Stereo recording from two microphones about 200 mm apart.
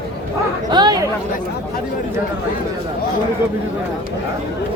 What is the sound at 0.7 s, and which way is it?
Chatter, 20° right (ahead or behind).